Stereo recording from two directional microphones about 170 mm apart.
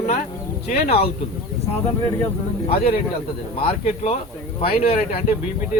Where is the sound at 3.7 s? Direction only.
40° left (ahead or behind).